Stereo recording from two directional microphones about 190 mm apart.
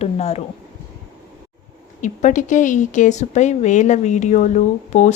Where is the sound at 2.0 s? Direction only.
40° left (ahead or behind).